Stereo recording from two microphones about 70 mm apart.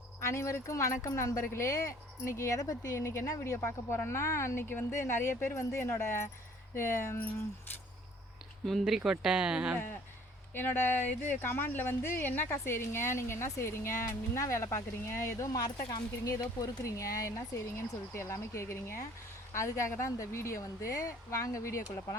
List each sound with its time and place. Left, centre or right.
0.2 s speech: left
3.6 s speech: left
8.8 s speech: centre
10.5 s speech: left